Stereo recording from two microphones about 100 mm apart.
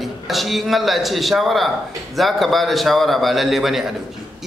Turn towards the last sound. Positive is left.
turn(degrees=0)  # may be behind; listen again after turning